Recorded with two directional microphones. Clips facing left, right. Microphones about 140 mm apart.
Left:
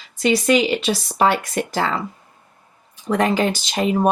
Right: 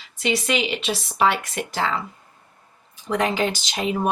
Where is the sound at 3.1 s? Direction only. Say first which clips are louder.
Left 4 dB; 45° left (ahead or behind).